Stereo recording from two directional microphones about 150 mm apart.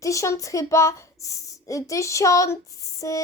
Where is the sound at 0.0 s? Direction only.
20° left (ahead or behind).